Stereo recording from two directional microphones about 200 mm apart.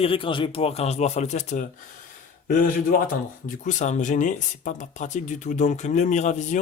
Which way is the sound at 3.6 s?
35° left (ahead or behind).